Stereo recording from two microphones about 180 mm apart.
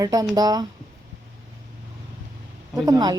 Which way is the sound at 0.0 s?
20° right (ahead or behind).